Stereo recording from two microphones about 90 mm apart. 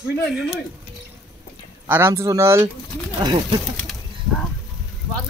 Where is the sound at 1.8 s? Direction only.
25° right (ahead or behind).